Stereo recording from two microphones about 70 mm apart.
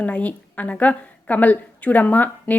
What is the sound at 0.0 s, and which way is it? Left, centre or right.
A woman's voice, left.